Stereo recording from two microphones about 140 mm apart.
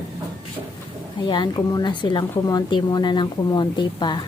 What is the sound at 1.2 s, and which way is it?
Speech, 35° left (ahead or behind).